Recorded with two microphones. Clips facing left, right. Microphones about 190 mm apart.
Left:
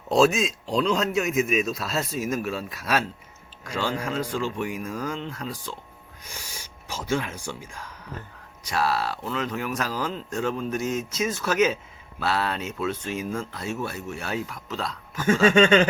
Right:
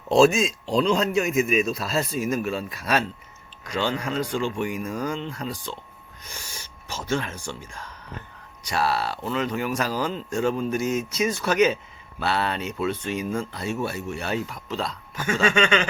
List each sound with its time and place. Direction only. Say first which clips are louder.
0.1 s speech: right 2 dB; centre (ahead or behind)
8.6 s speech: right 1 dB; centre (ahead or behind)
15.3 s a sound: left 4 dB; 40° left (ahead or behind)